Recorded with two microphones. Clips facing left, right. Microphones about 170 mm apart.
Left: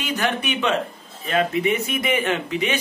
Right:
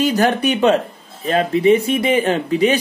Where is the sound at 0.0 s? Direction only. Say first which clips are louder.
Right 9 dB; 40° right (ahead or behind).